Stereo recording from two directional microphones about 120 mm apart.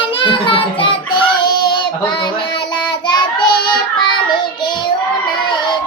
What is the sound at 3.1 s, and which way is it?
Child singing, 40° left (ahead or behind).